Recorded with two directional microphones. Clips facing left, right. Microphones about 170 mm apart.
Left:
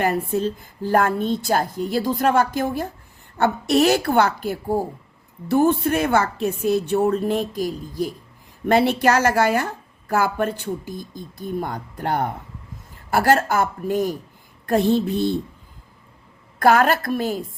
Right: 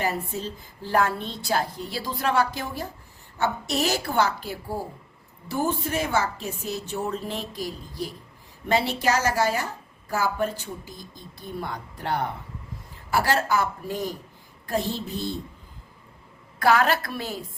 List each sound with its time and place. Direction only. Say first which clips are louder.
0.0 s a woman's voice: left 7 dB; 55° left (ahead or behind)
16.6 s a woman's voice: left 4 dB; 50° left (ahead or behind)